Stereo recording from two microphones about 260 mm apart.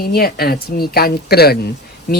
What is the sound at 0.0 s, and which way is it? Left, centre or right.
Speech, left.